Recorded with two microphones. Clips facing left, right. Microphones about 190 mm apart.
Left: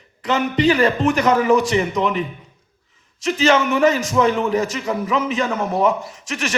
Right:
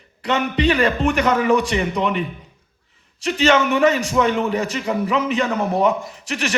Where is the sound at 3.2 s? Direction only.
35° right (ahead or behind).